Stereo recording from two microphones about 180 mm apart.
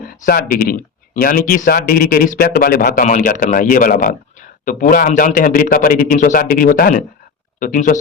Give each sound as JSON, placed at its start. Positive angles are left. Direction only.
{"t": 0.3, "sound": "speech", "side_deg": 55}